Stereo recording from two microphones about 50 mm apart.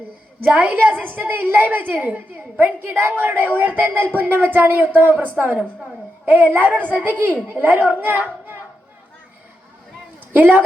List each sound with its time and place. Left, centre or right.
0.4 s a child's voice: right
6.7 s a child's voice: left
7.0 s a woman's voice: right
10.3 s a child's voice: right